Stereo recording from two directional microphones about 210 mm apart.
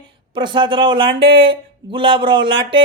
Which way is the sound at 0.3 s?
20° right (ahead or behind).